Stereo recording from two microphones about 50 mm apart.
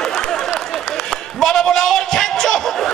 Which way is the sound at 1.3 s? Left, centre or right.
Centre.